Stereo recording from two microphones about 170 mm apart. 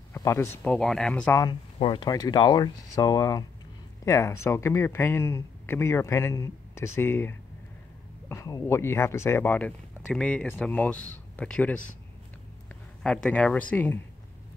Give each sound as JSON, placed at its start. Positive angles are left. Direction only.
{"t": 0.1, "sound": "speech", "side_deg": 15}
{"t": 0.7, "sound": "speech", "side_deg": 5}
{"t": 1.4, "sound": "speech", "side_deg": 30}
{"t": 13.0, "sound": "speech", "side_deg": 5}